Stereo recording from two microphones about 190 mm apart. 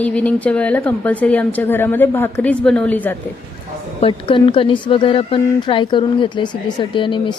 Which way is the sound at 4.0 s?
25° left (ahead or behind).